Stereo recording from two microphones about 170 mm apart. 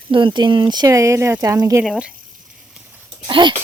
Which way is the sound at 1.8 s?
5° right (ahead or behind).